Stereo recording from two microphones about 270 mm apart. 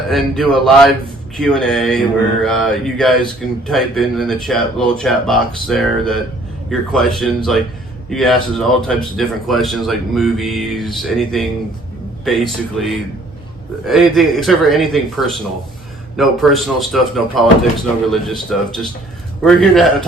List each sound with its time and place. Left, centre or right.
0.1 s speech: centre